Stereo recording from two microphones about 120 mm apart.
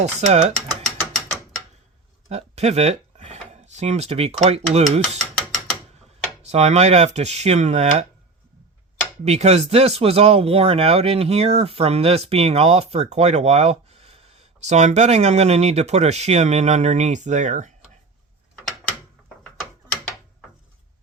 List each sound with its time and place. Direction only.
0.0 s speech: 70° right (ahead or behind)
1.1 s mechanisms: centre (ahead or behind)
2.3 s a sound: 60° right (ahead or behind)
3.5 s speech: 70° right (ahead or behind)
6.4 s speech: 70° right (ahead or behind)
9.2 s speech: 65° right (ahead or behind)
14.6 s speech: 75° right (ahead or behind); by 17.7 s 90° right